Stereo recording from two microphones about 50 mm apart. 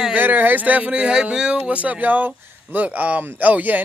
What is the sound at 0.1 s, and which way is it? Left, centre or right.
Speech, right.